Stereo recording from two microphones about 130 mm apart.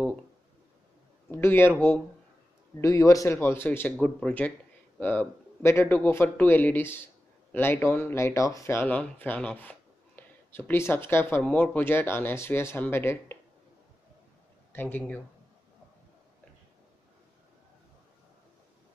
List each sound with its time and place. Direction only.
1.3 s speech: 15° left (ahead or behind)
2.8 s a man's voice: 25° left (ahead or behind)
14.7 s speech: 15° left (ahead or behind)